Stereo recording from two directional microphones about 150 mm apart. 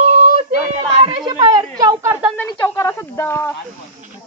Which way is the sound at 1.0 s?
30° right (ahead or behind).